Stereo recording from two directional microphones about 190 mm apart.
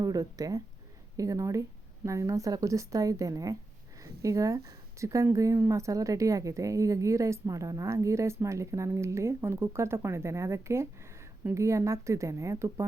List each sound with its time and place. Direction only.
0.0 s speech: 20° right (ahead or behind)